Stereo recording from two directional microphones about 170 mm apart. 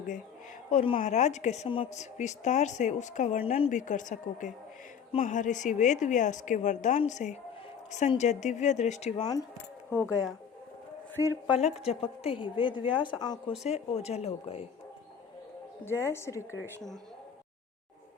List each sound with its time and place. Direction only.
0.7 s speech: 35° left (ahead or behind)
3.7 s a woman's voice: 50° left (ahead or behind)
9.1 s a woman's voice: 25° left (ahead or behind)
9.9 s a woman's voice: 15° left (ahead or behind)
11.4 s a woman's voice: 35° left (ahead or behind)
13.7 s speech: 40° left (ahead or behind)
15.8 s a woman's voice: 15° left (ahead or behind)